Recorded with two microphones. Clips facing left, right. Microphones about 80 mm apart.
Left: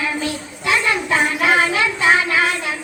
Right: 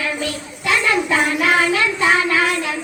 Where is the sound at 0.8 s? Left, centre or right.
Left.